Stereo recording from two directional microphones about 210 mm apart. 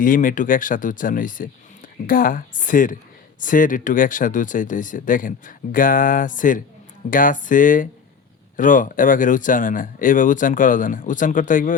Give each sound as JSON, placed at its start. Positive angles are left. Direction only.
{"t": 0.0, "sound": "speech", "side_deg": 40}